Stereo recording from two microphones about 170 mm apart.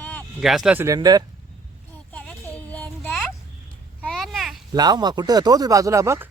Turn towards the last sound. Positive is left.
turn(degrees=-15)  # may be behind; listen again after turning